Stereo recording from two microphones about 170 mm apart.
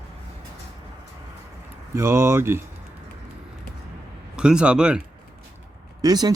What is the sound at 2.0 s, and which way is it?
Speech, 15° right (ahead or behind).